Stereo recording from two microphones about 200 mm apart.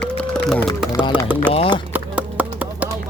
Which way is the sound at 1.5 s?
30° left (ahead or behind).